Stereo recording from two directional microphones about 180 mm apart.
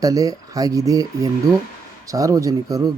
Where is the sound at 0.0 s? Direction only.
20° right (ahead or behind).